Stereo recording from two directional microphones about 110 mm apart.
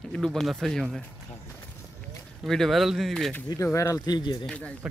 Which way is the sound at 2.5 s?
Centre (ahead or behind).